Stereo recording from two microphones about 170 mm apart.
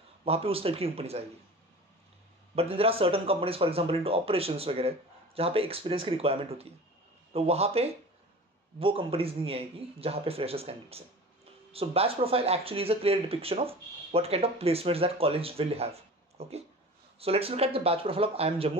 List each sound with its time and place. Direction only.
0.2 s speech: 35° right (ahead or behind)
2.5 s speech: 35° right (ahead or behind)